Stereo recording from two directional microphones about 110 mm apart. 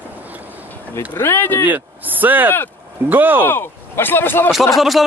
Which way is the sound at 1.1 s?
20° left (ahead or behind).